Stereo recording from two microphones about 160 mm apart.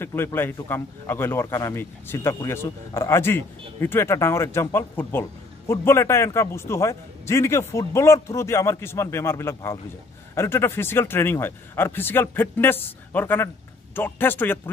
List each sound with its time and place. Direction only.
0.0 s a man's voice: 15° left (ahead or behind)